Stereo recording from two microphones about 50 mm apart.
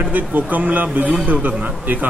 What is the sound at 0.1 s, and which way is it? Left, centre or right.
Speech, right.